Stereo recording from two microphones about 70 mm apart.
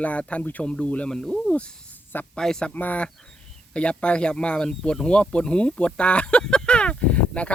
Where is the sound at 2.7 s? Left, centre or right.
Left.